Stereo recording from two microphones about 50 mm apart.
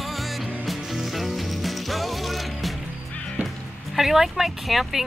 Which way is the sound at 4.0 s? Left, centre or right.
Centre.